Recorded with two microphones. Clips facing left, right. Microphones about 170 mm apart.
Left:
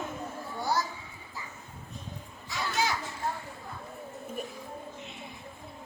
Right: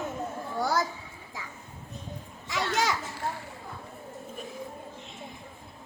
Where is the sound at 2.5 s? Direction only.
85° right.